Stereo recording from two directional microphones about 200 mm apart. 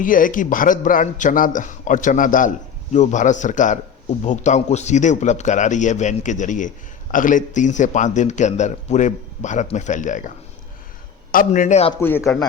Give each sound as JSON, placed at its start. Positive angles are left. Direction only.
{"t": 0.0, "sound": "a man's voice", "side_deg": 45}
{"t": 11.9, "sound": "speech", "side_deg": 10}